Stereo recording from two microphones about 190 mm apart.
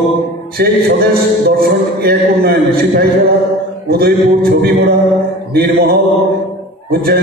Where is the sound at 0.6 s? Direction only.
55° right (ahead or behind).